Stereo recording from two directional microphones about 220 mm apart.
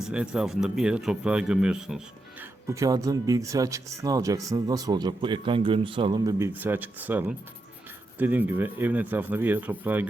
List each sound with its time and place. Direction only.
0.0 s speech: 5° right (ahead or behind)